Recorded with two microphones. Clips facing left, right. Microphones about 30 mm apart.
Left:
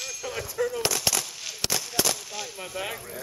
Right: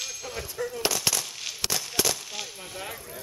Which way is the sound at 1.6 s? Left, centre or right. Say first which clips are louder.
Left 1 dB; centre.